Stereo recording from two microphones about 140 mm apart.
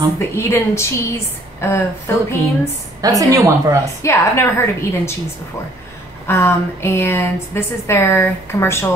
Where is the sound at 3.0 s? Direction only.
25° right (ahead or behind).